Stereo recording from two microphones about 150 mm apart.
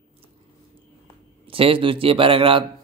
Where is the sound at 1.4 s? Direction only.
35° right (ahead or behind).